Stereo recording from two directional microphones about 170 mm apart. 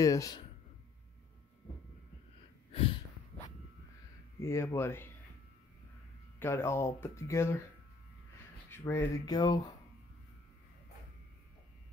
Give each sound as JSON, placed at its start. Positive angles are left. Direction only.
{"t": 0.0, "sound": "speech", "side_deg": 20}
{"t": 2.7, "sound": "snort", "side_deg": 35}
{"t": 4.4, "sound": "speech", "side_deg": 15}
{"t": 6.4, "sound": "speech", "side_deg": 15}
{"t": 8.6, "sound": "speech", "side_deg": 15}